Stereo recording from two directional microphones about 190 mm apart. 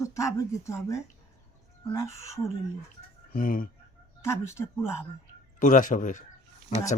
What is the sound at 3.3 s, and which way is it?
Speech, 45° left (ahead or behind).